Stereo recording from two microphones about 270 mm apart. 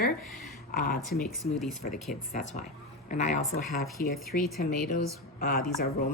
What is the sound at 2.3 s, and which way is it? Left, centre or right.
Speech, left.